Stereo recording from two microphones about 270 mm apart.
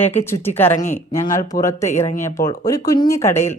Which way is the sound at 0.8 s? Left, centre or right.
Left.